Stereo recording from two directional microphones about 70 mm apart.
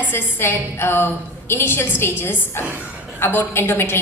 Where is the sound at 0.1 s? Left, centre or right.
Left.